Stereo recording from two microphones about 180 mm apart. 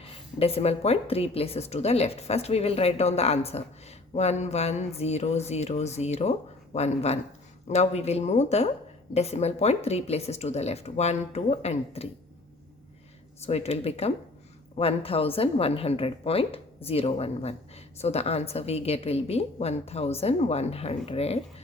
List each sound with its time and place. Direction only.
0.0 s a woman's voice: 35° left (ahead or behind)
13.4 s a woman's voice: 35° left (ahead or behind)